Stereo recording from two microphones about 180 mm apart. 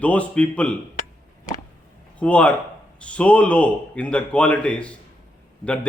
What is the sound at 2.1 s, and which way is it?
Speech, 5° left (ahead or behind).